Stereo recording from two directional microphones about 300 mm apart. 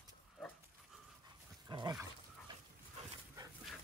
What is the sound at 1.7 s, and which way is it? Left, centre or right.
Dog, centre.